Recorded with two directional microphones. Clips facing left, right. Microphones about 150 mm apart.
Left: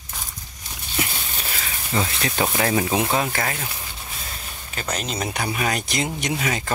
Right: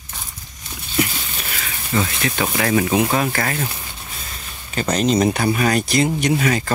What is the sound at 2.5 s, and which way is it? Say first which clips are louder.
Speech: right 6 dB; 20° left (ahead or behind).